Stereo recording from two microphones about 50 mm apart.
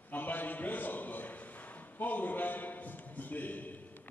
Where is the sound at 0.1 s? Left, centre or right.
Left.